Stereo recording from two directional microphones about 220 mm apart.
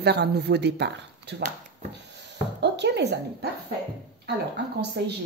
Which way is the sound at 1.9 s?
50° right (ahead or behind).